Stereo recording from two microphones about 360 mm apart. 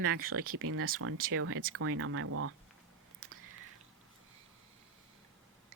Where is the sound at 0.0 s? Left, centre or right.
Right.